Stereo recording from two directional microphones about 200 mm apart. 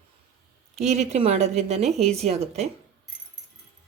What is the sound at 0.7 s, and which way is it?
Speech, 35° right (ahead or behind).